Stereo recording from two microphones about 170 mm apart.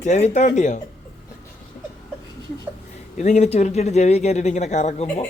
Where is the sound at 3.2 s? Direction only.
45° left (ahead or behind).